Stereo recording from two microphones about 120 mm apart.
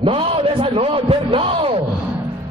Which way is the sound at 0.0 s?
45° right (ahead or behind).